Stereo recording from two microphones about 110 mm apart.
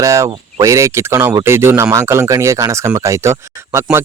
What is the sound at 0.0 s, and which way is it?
Speech, 30° right (ahead or behind).